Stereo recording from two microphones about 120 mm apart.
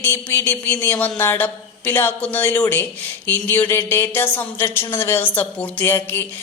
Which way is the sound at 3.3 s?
15° left (ahead or behind).